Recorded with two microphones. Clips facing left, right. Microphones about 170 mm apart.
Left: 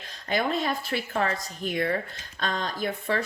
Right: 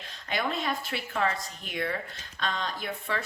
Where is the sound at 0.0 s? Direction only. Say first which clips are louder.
Left 4 dB; 40° left (ahead or behind).